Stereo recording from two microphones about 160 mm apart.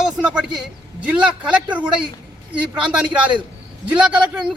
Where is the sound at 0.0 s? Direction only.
5° right (ahead or behind).